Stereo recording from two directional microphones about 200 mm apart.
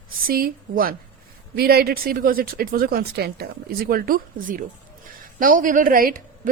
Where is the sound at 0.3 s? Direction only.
50° right (ahead or behind).